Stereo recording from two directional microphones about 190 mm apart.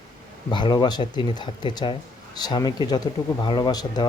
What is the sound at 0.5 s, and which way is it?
Speech, 25° left (ahead or behind).